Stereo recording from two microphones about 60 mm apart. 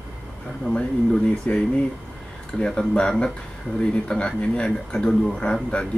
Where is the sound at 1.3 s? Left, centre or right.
Left.